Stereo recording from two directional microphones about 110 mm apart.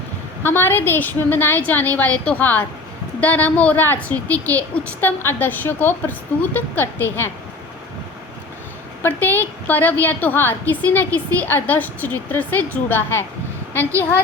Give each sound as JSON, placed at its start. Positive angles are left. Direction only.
{"t": 0.4, "sound": "a woman's voice", "side_deg": 20}
{"t": 9.0, "sound": "a woman's voice", "side_deg": 20}